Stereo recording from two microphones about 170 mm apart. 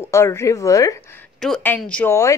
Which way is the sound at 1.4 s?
5° left (ahead or behind).